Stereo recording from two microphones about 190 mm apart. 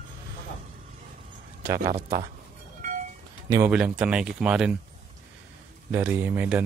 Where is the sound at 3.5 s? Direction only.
10° right (ahead or behind).